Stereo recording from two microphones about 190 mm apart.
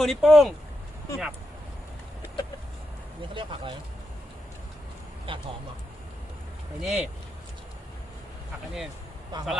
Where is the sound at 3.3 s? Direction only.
25° right (ahead or behind).